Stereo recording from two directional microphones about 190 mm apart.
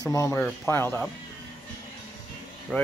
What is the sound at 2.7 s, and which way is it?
Speech, 5° left (ahead or behind).